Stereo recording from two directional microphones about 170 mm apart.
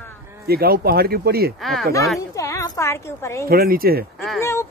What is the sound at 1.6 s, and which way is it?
Speech, centre (ahead or behind).